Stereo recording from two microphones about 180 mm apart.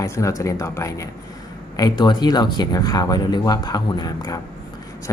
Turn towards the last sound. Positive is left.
turn(degrees=20)  # may be behind; listen again after turning